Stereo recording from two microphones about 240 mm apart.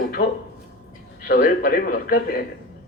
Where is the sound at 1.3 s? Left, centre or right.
Left.